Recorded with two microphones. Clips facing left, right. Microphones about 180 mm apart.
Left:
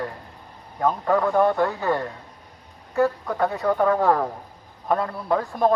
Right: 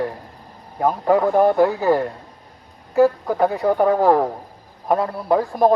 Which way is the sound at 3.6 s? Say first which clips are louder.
Right 3 dB; 30° right (ahead or behind).